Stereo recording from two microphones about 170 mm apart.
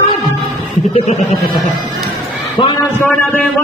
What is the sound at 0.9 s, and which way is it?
Speech, 35° left (ahead or behind).